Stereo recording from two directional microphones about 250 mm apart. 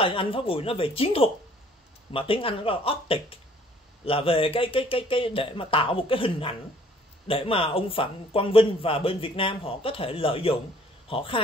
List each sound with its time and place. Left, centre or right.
0.0 s speech: left